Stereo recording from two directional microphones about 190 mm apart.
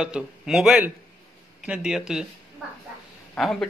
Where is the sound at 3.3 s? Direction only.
Centre (ahead or behind).